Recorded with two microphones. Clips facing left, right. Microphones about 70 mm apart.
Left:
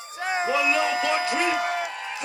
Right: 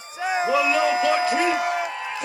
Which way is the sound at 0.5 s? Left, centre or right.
Right.